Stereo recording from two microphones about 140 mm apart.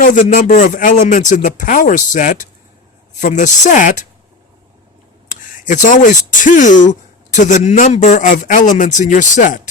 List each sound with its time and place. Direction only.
0.0 s a man's voice: 70° left (ahead or behind)
5.3 s a man's voice: 65° left (ahead or behind)